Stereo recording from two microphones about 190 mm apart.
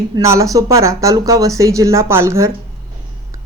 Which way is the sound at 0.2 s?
15° right (ahead or behind).